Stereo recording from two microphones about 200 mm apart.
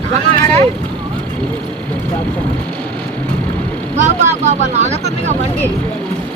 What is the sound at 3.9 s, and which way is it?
Speech, 35° right (ahead or behind).